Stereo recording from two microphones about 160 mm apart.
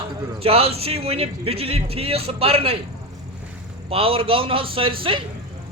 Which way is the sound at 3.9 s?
35° right (ahead or behind).